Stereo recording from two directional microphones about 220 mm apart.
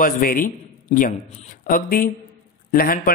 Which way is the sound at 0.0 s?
40° left (ahead or behind).